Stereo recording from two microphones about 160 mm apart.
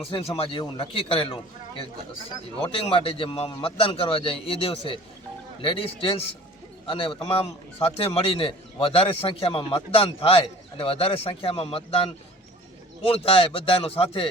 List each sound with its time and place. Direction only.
0.1 s a man's voice: 35° left (ahead or behind)
2.6 s a man's voice: 35° left (ahead or behind)